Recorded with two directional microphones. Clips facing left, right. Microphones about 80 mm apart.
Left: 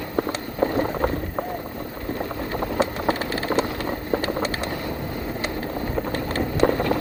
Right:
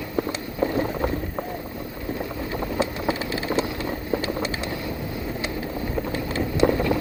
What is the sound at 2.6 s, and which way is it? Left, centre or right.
Vehicle, left.